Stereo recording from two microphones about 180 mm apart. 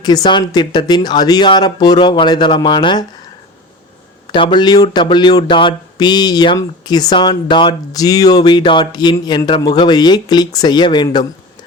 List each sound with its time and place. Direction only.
0.0 s speech: 20° left (ahead or behind)
4.3 s speech: 25° left (ahead or behind)